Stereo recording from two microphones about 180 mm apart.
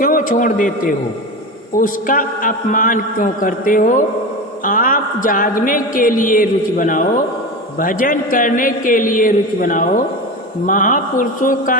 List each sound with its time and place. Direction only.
0.0 s a man's voice: 50° left (ahead or behind)